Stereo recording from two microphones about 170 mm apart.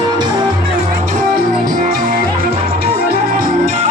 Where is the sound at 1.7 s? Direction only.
55° right (ahead or behind).